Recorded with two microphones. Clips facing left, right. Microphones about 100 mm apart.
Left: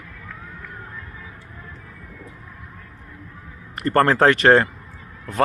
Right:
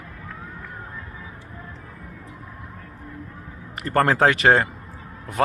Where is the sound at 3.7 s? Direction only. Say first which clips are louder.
Left 2 dB; centre (ahead or behind).